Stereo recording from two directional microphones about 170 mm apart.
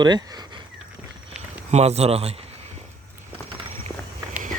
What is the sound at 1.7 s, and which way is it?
Speech, 40° right (ahead or behind).